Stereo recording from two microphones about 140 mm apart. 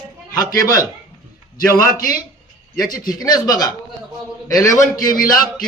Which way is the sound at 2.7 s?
25° left (ahead or behind).